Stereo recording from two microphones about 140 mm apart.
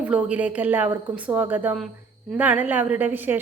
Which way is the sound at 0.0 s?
10° right (ahead or behind).